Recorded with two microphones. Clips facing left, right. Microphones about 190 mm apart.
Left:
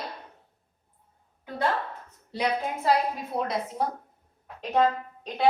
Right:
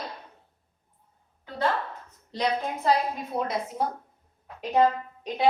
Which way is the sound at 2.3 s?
5° left (ahead or behind).